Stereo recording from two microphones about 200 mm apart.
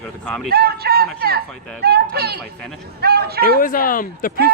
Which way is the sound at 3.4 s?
45° left (ahead or behind).